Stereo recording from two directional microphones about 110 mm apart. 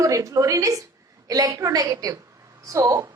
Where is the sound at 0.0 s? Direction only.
30° right (ahead or behind).